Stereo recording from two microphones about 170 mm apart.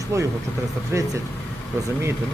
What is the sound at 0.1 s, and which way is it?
Speech, 15° right (ahead or behind).